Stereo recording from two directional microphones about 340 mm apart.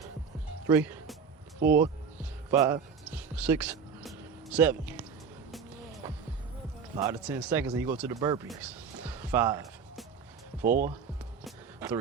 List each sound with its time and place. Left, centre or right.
0.7 s music: centre
1.6 s speech: right
2.5 s music: centre
4.5 s speech: centre
5.5 s music: centre
6.9 s speech: centre
9.0 s music: centre
10.7 s speech: right
11.4 s a sound: centre